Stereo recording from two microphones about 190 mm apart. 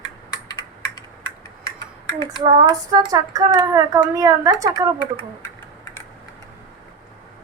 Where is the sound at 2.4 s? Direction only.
20° right (ahead or behind).